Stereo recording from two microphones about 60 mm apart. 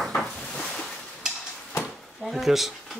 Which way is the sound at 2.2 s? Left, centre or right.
Centre.